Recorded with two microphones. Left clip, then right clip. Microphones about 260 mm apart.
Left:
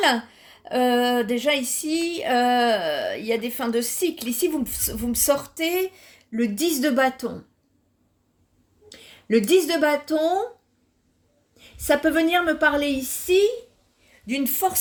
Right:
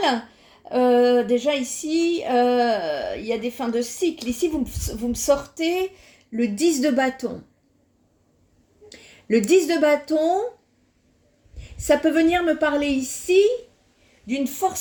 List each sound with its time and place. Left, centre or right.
0.0 s speech: left
8.9 s speech: left
11.5 s a woman's voice: left